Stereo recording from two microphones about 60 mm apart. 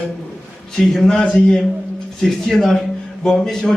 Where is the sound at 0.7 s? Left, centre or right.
Centre.